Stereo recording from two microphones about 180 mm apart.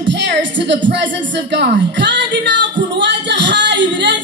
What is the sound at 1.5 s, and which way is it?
A woman's voice, 75° right (ahead or behind).